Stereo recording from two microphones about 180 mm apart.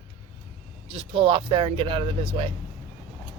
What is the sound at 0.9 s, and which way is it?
Speech, 30° right (ahead or behind).